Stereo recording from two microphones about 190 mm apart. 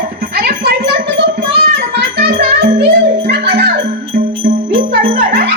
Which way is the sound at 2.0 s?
55° right (ahead or behind).